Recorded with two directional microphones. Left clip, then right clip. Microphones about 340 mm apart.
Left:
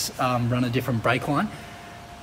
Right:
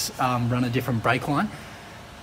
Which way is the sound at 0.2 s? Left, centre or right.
Centre.